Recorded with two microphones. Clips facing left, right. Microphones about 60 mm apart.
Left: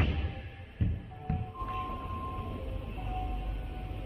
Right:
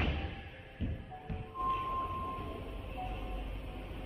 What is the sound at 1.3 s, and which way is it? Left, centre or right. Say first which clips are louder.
Music: left 9 dB; left.